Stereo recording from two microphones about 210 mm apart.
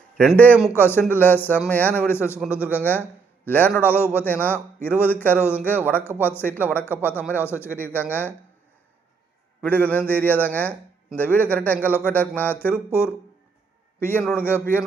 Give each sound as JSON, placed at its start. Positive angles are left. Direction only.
{"t": 0.2, "sound": "a man's voice", "side_deg": 5}
{"t": 9.6, "sound": "a man's voice", "side_deg": 10}